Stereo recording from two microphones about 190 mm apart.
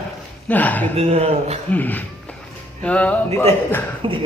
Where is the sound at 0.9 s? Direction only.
35° right (ahead or behind).